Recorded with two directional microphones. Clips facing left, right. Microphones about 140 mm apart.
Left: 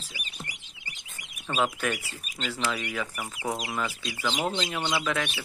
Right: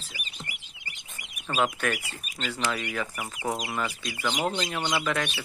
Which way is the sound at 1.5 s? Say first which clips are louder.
Right 1 dB; centre (ahead or behind).